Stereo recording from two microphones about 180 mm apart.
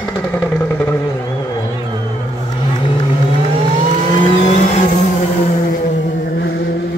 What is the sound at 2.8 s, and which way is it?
Vehicle, 30° left (ahead or behind).